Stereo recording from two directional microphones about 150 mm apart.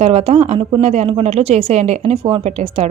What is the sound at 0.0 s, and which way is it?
Speech, 45° right (ahead or behind).